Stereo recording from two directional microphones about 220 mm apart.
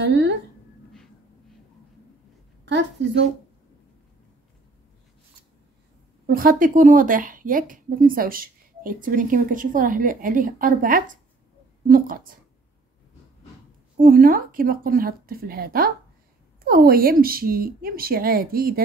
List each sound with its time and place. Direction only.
0.0 s speech: 50° right (ahead or behind)
2.6 s a woman's voice: 55° right (ahead or behind)
6.2 s speech: 40° right (ahead or behind)
13.9 s a woman's voice: 40° right (ahead or behind)